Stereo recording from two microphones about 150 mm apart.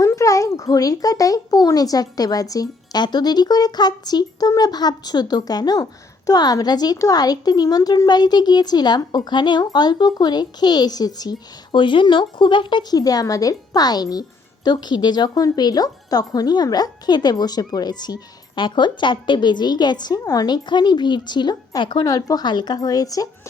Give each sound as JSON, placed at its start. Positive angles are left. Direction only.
{"t": 0.0, "sound": "a child's voice", "side_deg": 20}